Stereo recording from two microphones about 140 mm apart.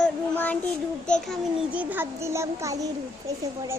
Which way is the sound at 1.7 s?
15° right (ahead or behind).